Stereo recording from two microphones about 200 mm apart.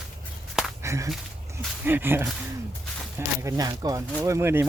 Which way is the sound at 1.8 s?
10° right (ahead or behind).